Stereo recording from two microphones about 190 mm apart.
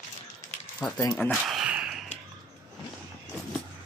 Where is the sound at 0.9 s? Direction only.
10° left (ahead or behind).